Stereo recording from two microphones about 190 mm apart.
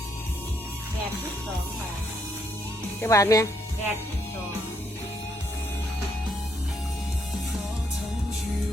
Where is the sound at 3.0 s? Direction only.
15° left (ahead or behind).